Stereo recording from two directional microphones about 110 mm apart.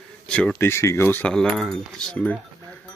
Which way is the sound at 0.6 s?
25° left (ahead or behind).